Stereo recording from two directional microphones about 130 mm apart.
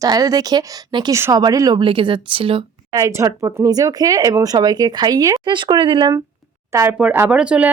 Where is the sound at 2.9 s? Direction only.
25° right (ahead or behind).